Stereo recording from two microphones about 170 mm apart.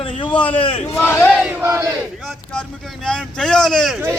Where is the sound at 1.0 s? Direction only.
10° left (ahead or behind).